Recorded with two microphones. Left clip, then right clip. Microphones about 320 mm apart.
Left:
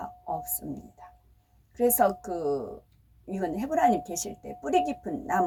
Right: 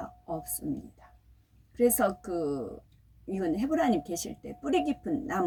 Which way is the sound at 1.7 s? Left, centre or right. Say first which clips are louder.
Left 2 dB; centre.